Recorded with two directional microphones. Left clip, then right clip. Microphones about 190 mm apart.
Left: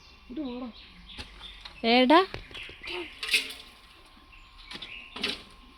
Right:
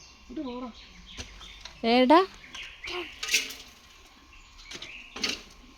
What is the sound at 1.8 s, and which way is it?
Speech, 10° right (ahead or behind).